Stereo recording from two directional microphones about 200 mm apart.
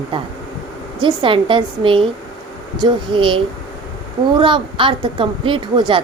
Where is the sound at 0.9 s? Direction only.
25° right (ahead or behind).